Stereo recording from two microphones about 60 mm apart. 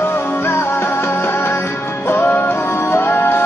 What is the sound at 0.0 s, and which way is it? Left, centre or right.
Music, left.